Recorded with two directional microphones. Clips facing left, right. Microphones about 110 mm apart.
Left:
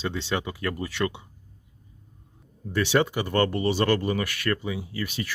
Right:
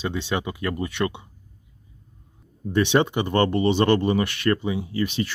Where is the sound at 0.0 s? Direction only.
15° right (ahead or behind).